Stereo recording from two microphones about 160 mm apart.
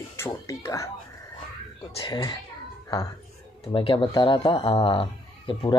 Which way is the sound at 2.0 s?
30° left (ahead or behind).